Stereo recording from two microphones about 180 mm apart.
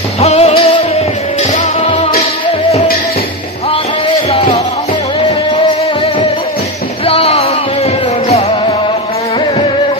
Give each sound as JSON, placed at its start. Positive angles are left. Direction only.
{"t": 0.2, "sound": "music", "side_deg": 35}
{"t": 4.3, "sound": "music", "side_deg": 35}
{"t": 7.1, "sound": "music", "side_deg": 35}